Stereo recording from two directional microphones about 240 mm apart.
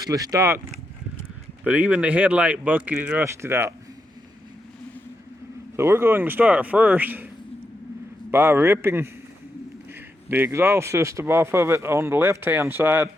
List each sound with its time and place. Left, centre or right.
0.0 s speech: centre
1.6 s speech: centre
5.7 s speech: centre
8.3 s speech: centre
10.2 s speech: centre